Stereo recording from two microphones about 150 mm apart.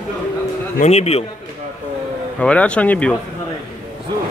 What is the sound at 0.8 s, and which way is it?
Speech, 45° left (ahead or behind).